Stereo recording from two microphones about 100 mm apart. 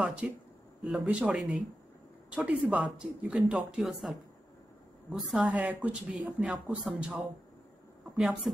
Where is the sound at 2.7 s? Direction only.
10° right (ahead or behind).